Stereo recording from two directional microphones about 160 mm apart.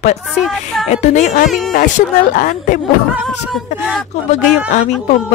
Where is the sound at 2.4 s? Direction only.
55° left (ahead or behind).